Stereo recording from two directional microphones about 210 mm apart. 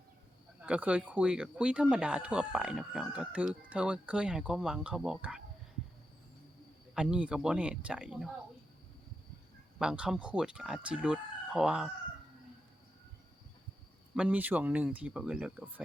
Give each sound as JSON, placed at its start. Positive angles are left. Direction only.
{"t": 0.6, "sound": "speech", "side_deg": -5}
{"t": 6.9, "sound": "speech", "side_deg": -5}
{"t": 9.7, "sound": "speech", "side_deg": -5}
{"t": 14.2, "sound": "speech", "side_deg": -5}